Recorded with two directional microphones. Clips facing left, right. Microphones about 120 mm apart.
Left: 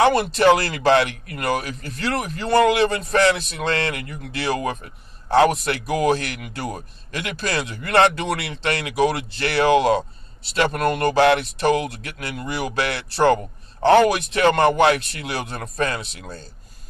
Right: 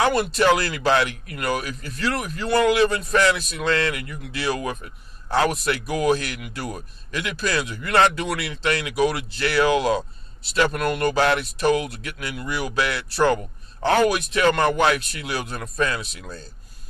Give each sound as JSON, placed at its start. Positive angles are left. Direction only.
{"t": 0.0, "sound": "speech", "side_deg": 30}
{"t": 11.2, "sound": "speech", "side_deg": 30}